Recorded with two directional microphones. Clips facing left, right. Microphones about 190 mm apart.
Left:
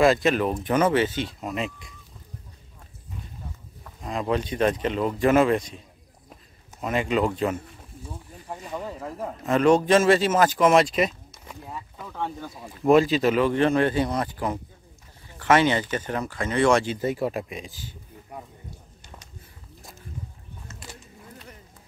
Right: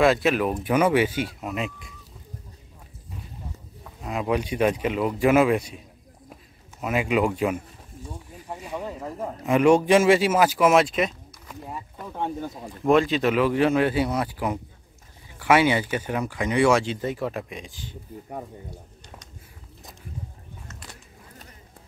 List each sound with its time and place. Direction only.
0.0 s speech: 5° right (ahead or behind)
3.8 s speech: 5° right (ahead or behind)
6.8 s speech: 5° right (ahead or behind)
8.1 s snake: 10° right (ahead or behind)
9.5 s speech: 10° right (ahead or behind)
12.1 s speech: 20° right (ahead or behind)
12.8 s speech: 5° left (ahead or behind)
16.8 s speech: 5° left (ahead or behind)